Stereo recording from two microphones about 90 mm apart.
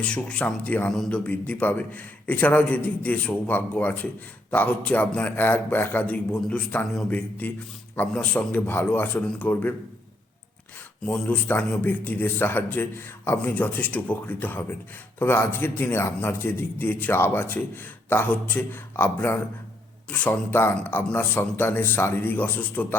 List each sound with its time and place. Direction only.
0.0 s a man's voice: 10° left (ahead or behind)
0.9 s a man's voice: 5° left (ahead or behind)
1.2 s a man's voice: 15° left (ahead or behind)
11.0 s a man's voice: 15° left (ahead or behind)